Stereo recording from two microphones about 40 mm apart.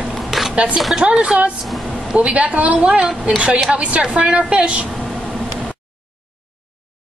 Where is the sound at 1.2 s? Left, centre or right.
Right.